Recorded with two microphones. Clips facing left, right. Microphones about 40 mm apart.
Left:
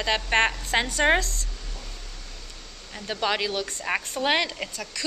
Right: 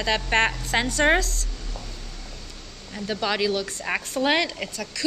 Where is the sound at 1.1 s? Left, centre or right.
Left.